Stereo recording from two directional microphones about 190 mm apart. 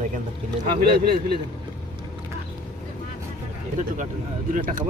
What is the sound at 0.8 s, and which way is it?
Speech, 60° right (ahead or behind).